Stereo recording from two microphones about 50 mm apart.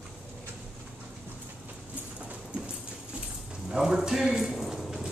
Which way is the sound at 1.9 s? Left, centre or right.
Right.